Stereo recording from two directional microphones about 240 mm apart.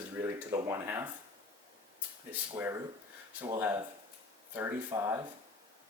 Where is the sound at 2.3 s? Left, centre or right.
Centre.